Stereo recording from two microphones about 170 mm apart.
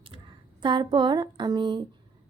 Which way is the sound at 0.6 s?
30° right (ahead or behind).